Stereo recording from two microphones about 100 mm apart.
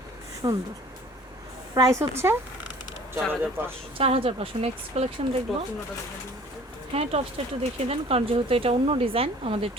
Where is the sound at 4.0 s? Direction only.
70° right (ahead or behind); by 5.4 s 90° right.